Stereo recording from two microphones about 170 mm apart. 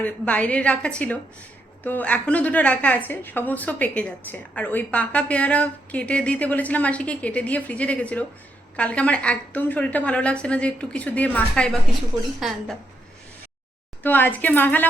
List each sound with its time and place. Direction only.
0.0 s a woman's voice: 10° left (ahead or behind)
14.0 s a woman's voice: 10° left (ahead or behind)